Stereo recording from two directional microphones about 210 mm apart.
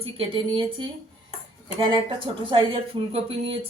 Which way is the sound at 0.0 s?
25° right (ahead or behind).